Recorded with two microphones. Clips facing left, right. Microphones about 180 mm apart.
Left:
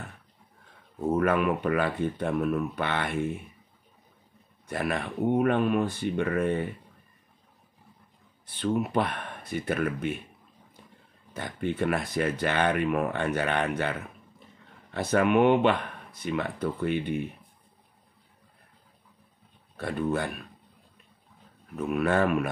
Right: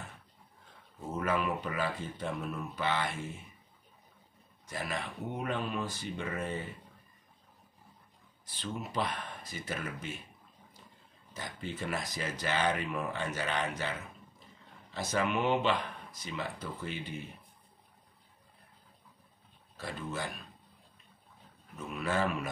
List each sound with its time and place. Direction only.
0.9 s speech: 60° left (ahead or behind)
4.6 s speech: 60° left (ahead or behind)
8.5 s speech: 60° left (ahead or behind)
11.3 s speech: 60° left (ahead or behind)
19.8 s speech: 60° left (ahead or behind)
21.7 s speech: 60° left (ahead or behind)